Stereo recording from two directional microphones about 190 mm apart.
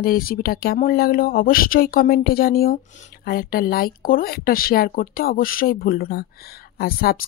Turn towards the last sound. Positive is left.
turn(degrees=50)  # may be behind; listen again after turning